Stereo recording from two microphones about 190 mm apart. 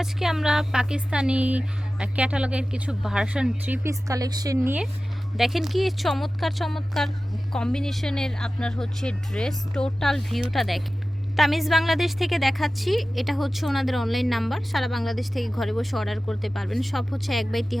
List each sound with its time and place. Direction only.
0.0 s a woman's voice: centre (ahead or behind)
3.8 s a woman's voice: 20° right (ahead or behind); by 17.7 s centre (ahead or behind)